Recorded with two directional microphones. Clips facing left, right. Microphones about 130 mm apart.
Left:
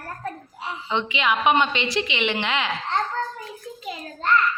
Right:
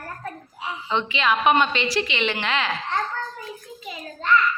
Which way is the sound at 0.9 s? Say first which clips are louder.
Right 1 dB; 15° left (ahead or behind).